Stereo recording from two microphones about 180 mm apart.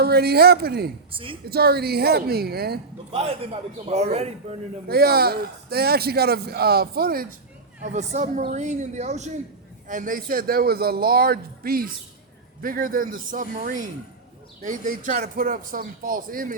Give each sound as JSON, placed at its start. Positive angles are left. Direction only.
{"t": 0.0, "sound": "a man's voice", "side_deg": -60}
{"t": 3.1, "sound": "a man's voice", "side_deg": -35}
{"t": 4.9, "sound": "a man's voice", "side_deg": -60}
{"t": 7.9, "sound": "a man's voice", "side_deg": -40}